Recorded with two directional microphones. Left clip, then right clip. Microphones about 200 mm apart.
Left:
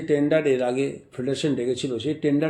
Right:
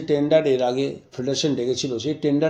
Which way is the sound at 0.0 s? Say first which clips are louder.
Right 2 dB; 15° right (ahead or behind).